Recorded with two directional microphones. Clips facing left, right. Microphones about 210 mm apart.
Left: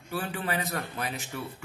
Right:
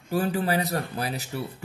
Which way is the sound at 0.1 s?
40° right (ahead or behind).